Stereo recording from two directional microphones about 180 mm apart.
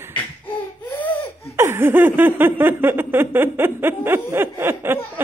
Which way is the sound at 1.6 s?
15° right (ahead or behind).